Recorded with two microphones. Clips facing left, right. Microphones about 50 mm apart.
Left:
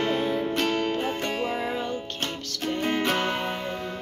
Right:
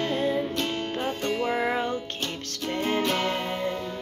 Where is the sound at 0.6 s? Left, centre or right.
Left.